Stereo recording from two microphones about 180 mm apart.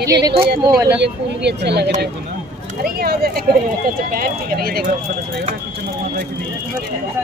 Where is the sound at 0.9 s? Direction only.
70° right (ahead or behind).